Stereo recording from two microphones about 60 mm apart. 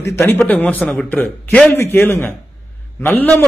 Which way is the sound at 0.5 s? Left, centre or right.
Left.